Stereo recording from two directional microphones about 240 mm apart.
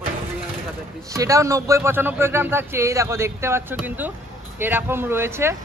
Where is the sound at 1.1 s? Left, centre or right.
Centre.